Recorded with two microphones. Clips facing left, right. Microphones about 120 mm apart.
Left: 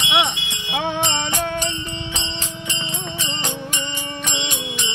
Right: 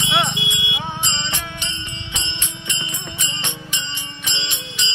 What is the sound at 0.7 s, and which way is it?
Music, 75° left (ahead or behind).